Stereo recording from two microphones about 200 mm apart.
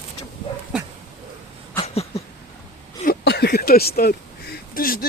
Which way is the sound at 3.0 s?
55° left (ahead or behind).